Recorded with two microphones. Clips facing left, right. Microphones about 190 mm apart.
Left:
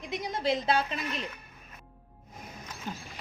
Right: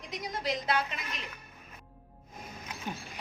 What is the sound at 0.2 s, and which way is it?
A woman's voice, 25° left (ahead or behind).